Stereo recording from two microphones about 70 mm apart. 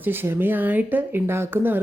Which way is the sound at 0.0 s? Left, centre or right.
Right.